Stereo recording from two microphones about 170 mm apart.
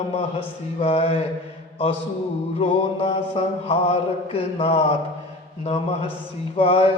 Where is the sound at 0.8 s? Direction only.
35° left (ahead or behind).